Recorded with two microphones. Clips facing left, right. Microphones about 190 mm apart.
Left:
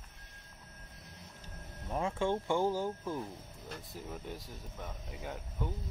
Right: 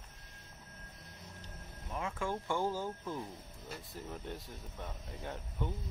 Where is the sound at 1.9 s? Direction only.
30° left (ahead or behind); by 3.2 s 15° left (ahead or behind).